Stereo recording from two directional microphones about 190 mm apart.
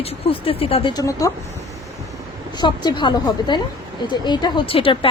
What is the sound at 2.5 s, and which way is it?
Speech, 25° left (ahead or behind).